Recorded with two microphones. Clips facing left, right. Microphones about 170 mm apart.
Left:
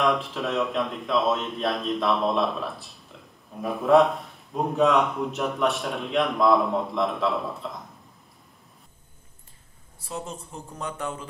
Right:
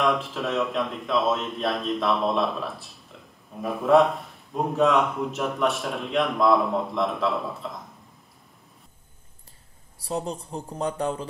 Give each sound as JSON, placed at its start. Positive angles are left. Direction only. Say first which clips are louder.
{"t": 0.0, "sound": "speech", "louder": "even", "side_deg": 0}
{"t": 9.9, "sound": "speech", "louder": "right 5 dB", "side_deg": -35}